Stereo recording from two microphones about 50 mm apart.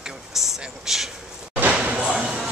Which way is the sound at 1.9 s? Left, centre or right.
Right.